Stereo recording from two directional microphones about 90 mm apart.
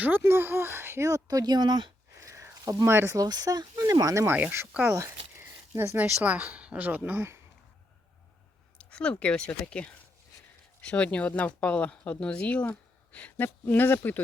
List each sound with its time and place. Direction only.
0.0 s speech: 25° right (ahead or behind); by 1.9 s 55° right (ahead or behind)
2.2 s a sound: 35° right (ahead or behind)
2.9 s speech: 30° right (ahead or behind)
3.2 s speech: 45° right (ahead or behind); by 4.7 s 25° right (ahead or behind)
4.9 s zipper: 30° right (ahead or behind)
6.0 s speech: 15° right (ahead or behind)
8.8 s speech: 10° left (ahead or behind)